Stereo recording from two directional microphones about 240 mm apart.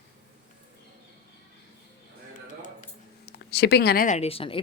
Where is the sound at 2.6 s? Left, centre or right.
Left.